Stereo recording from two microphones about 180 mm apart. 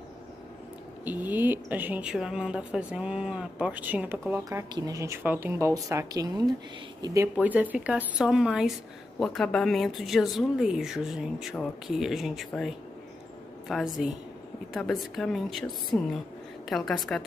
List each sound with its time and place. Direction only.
1.0 s a woman's voice: 10° right (ahead or behind)
7.3 s a woman's voice: 10° right (ahead or behind)